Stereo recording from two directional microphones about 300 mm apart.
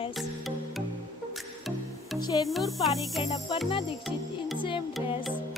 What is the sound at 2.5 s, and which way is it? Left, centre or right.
Music, centre.